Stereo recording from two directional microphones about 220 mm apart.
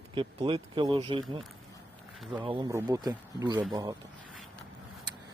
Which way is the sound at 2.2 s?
5° right (ahead or behind).